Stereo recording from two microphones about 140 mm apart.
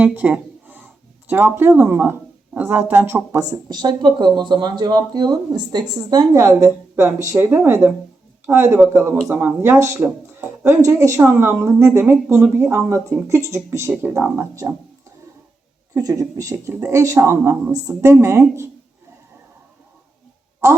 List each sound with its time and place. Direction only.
0.0 s a sound: 10° right (ahead or behind)
1.3 s a woman's voice: 15° right (ahead or behind)
16.0 s speech: 25° right (ahead or behind)
20.6 s a woman's voice: 20° right (ahead or behind)